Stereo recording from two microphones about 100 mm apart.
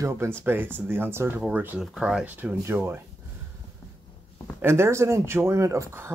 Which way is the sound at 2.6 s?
25° right (ahead or behind).